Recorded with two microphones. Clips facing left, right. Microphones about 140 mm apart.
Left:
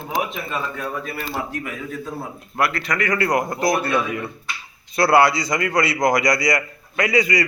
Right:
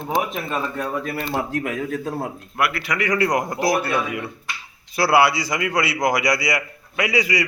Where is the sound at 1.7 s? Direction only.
55° right (ahead or behind).